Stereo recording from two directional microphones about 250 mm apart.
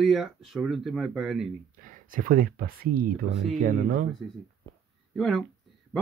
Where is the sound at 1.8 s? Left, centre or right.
Right.